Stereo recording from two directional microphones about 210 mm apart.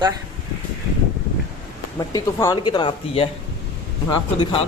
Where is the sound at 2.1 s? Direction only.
15° left (ahead or behind).